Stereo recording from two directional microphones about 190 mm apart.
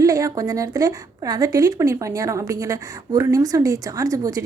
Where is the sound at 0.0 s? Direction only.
15° right (ahead or behind).